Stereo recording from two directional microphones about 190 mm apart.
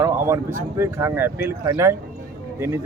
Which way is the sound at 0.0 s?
15° right (ahead or behind).